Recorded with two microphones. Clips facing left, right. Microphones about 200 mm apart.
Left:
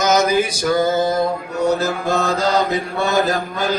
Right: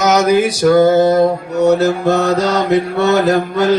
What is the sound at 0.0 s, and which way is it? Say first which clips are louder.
Mantra: right 4 dB; 70° right (ahead or behind).